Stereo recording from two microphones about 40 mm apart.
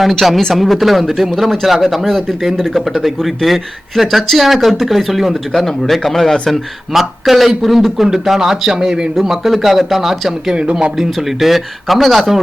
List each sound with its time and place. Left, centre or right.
0.0 s speech: centre
1.6 s speech: centre
2.6 s speech: centre
2.8 s speech: centre
8.0 s speech: centre
10.5 s speech: right
11.0 s speech: centre